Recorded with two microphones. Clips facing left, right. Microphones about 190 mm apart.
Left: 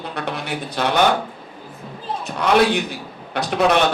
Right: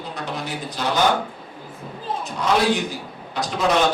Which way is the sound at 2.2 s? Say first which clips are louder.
Left 4 dB; 65° left (ahead or behind).